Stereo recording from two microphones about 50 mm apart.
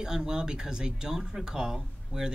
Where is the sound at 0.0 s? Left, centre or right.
Centre.